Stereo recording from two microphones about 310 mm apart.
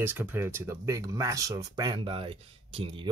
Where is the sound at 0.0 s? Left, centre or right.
Centre.